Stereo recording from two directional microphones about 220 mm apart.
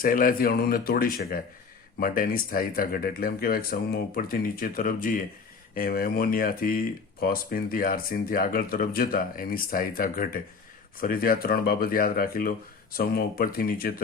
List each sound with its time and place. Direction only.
0.0 s speech: 40° left (ahead or behind)